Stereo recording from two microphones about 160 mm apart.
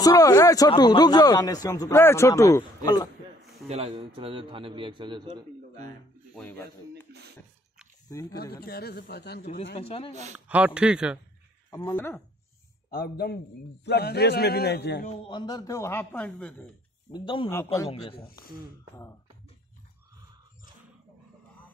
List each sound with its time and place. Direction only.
0.0 s a man's voice: 20° left (ahead or behind)
3.6 s a man's voice: 40° right (ahead or behind)
6.9 s a sound: 90° right
8.1 s a man's voice: 20° left (ahead or behind)
8.6 s speech: 70° left (ahead or behind)
9.8 s speech: 35° left (ahead or behind)
10.3 s speech: 10° right (ahead or behind)
11.7 s a man's voice: 25° left (ahead or behind)
13.8 s a man's voice: 90° left
15.2 s speech: 25° left (ahead or behind); by 16.7 s 5° left (ahead or behind)
17.1 s speech: 30° left (ahead or behind)
17.5 s speech: 15° left (ahead or behind)
17.8 s speech: 35° left (ahead or behind)